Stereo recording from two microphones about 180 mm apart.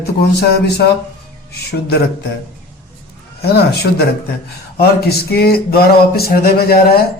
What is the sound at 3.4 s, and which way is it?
A man's voice, 60° left (ahead or behind).